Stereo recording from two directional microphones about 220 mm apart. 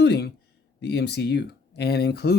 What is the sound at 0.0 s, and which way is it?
Speech, 50° left (ahead or behind).